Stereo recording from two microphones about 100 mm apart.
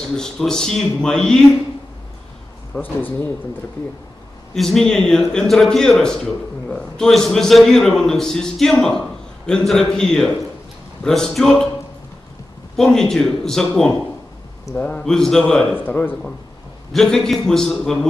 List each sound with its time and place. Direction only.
0.1 s a man's voice: 5° left (ahead or behind)
2.7 s a man's voice: 20° left (ahead or behind)
4.6 s a man's voice: 5° left (ahead or behind)
12.7 s a man's voice: 5° left (ahead or behind)
15.7 s a man's voice: 20° left (ahead or behind)
16.9 s a man's voice: 5° left (ahead or behind)